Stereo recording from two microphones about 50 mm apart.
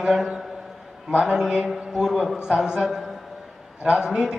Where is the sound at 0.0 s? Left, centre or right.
Centre.